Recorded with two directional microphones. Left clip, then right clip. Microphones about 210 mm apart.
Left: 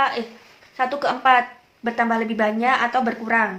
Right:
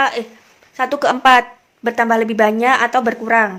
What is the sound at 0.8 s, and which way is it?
A woman's voice, 45° right (ahead or behind).